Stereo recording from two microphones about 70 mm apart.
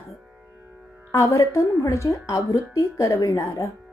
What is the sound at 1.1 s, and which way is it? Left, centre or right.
Speech, left.